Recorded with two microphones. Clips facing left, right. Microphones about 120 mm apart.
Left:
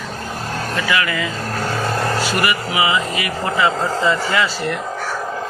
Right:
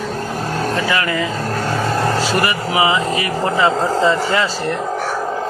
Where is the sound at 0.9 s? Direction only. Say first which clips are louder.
Right 2 dB; 30° right (ahead or behind).